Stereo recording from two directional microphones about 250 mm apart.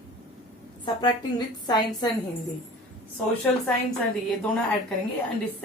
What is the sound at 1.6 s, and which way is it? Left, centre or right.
Speech, centre.